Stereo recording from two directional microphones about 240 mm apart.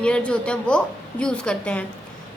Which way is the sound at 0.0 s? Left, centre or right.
Centre.